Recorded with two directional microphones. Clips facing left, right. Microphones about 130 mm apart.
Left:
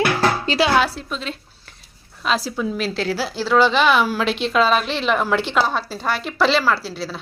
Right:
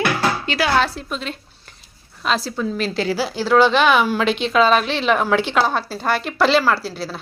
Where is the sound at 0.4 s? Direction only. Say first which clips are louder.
Left 3 dB; 30° left (ahead or behind).